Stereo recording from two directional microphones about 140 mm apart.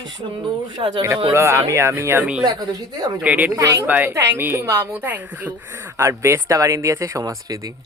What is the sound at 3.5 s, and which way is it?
Speech, 25° right (ahead or behind).